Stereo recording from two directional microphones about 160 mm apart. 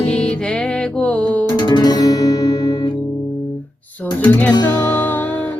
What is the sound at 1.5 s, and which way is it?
Music, 30° left (ahead or behind).